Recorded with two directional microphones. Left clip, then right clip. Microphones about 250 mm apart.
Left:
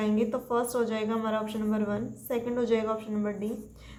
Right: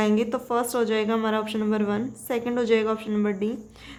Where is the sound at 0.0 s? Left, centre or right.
Right.